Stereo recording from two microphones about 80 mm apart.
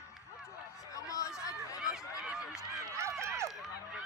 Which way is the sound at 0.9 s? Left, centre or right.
Left.